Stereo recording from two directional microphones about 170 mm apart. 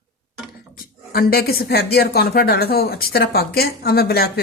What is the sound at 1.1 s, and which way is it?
Speech, 60° left (ahead or behind).